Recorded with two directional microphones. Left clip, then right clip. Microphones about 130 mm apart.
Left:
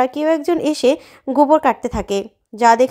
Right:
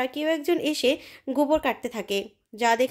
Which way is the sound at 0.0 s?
45° left (ahead or behind).